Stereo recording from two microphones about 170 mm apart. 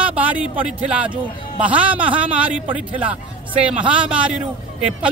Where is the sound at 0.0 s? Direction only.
10° right (ahead or behind).